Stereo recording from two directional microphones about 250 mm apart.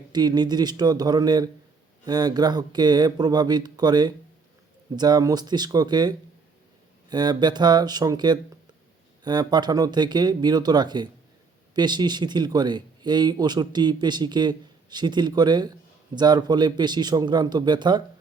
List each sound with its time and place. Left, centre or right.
0.1 s speech: centre